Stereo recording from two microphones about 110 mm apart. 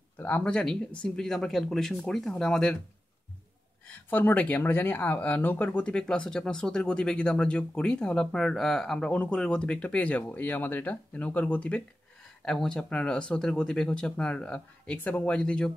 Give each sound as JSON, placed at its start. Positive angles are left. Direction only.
{"t": 0.2, "sound": "speech", "side_deg": 10}
{"t": 3.8, "sound": "speech", "side_deg": 15}